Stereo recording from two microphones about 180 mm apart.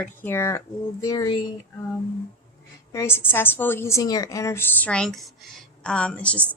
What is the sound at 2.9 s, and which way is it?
A woman's voice, 15° left (ahead or behind).